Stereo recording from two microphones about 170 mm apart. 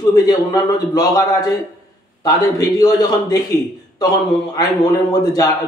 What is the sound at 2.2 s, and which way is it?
A man's voice, 20° left (ahead or behind).